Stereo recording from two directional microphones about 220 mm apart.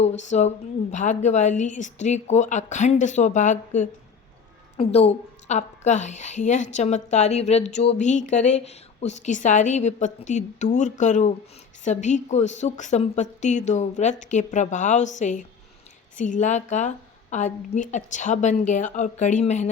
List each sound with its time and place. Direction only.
0.0 s a woman's voice: 30° left (ahead or behind)